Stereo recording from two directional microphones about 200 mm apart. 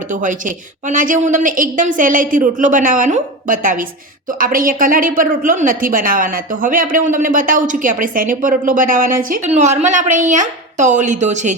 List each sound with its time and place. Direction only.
0.1 s a woman's voice: 40° right (ahead or behind)